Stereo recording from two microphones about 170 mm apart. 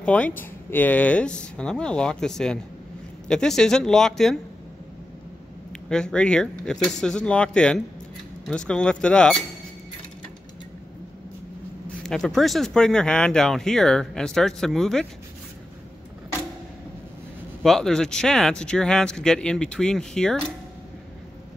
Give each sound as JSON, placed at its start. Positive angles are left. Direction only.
{"t": 0.0, "sound": "speech", "side_deg": 5}
{"t": 5.7, "sound": "speech", "side_deg": 5}
{"t": 12.1, "sound": "speech", "side_deg": 5}
{"t": 17.6, "sound": "speech", "side_deg": 5}